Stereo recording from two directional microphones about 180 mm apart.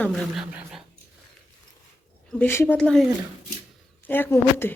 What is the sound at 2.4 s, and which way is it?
A woman's voice, 10° left (ahead or behind).